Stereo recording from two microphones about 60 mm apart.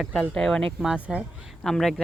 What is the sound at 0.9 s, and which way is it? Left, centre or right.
Speech, right.